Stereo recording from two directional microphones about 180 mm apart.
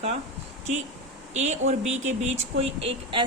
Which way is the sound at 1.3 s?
40° right (ahead or behind).